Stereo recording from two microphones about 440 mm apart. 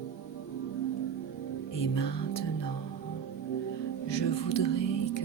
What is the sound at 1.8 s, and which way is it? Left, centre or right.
Music, left.